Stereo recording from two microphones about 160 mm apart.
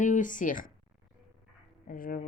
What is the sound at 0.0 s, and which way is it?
Speech, 55° left (ahead or behind).